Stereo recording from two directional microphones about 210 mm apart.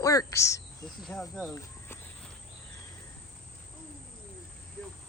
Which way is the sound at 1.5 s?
15° left (ahead or behind).